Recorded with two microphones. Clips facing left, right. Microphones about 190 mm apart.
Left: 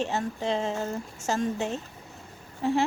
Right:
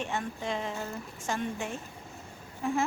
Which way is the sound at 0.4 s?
25° left (ahead or behind).